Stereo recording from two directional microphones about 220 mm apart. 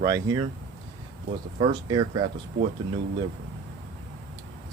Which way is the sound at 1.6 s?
20° right (ahead or behind).